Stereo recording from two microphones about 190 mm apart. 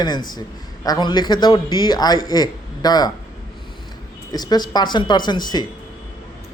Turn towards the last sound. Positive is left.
turn(degrees=20)  # may be behind; listen again after turning